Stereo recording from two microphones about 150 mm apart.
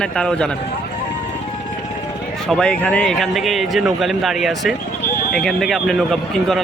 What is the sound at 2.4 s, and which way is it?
A man's voice, 5° left (ahead or behind).